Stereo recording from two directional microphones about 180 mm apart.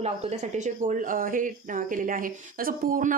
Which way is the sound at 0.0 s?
40° right (ahead or behind).